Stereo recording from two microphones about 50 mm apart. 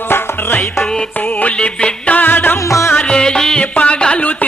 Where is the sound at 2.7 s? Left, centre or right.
Left.